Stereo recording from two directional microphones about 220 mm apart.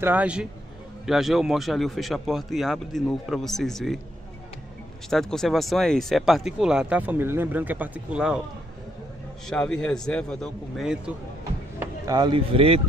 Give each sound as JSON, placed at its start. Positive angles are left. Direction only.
{"t": 0.0, "sound": "a man's voice", "side_deg": -5}
{"t": 5.1, "sound": "speech", "side_deg": 0}
{"t": 9.5, "sound": "speech", "side_deg": 5}
{"t": 11.8, "sound": "speech", "side_deg": -20}